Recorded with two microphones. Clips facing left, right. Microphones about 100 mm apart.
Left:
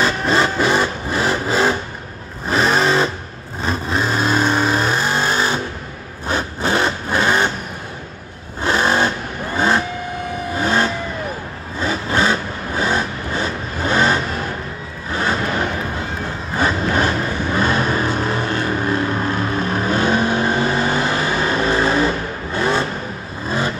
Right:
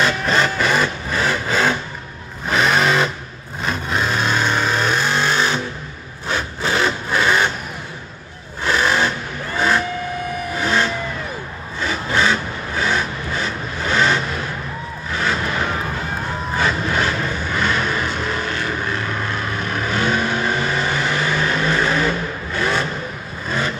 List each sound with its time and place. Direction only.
0.0 s vehicle: 30° left (ahead or behind)
2.5 s sewing machine: 35° left (ahead or behind)
3.6 s vehicle: 35° left (ahead or behind)
8.6 s vehicle: 35° left (ahead or behind)
10.5 s vehicle: 35° left (ahead or behind)
12.2 s vehicle: 35° left (ahead or behind)
16.6 s vehicle: 35° left (ahead or behind)